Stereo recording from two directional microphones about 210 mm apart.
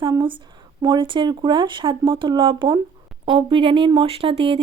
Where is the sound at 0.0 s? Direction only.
20° right (ahead or behind).